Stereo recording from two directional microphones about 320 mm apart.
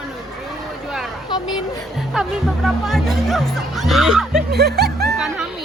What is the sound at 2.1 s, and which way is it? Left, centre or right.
Speech, centre.